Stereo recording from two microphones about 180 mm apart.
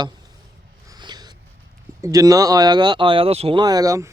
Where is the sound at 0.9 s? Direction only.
25° right (ahead or behind).